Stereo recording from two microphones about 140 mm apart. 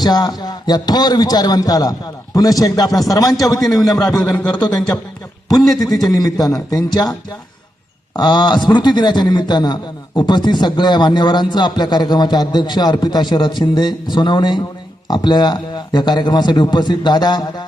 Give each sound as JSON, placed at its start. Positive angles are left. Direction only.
{"t": 0.0, "sound": "a man's voice", "side_deg": 30}
{"t": 3.6, "sound": "a man's voice", "side_deg": 0}
{"t": 5.6, "sound": "a man's voice", "side_deg": 0}
{"t": 5.9, "sound": "a man's voice", "side_deg": 25}
{"t": 8.1, "sound": "a man's voice", "side_deg": 30}